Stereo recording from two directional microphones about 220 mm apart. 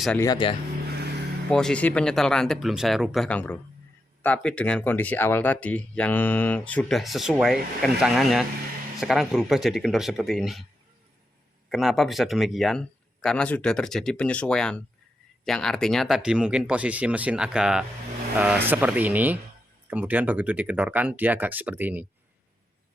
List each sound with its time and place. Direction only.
0.2 s speech: 20° left (ahead or behind)
0.9 s vehicle: 50° right (ahead or behind)
1.5 s speech: 5° left (ahead or behind)
11.7 s speech: centre (ahead or behind)